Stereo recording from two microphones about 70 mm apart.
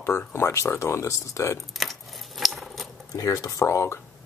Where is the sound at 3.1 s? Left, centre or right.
Left.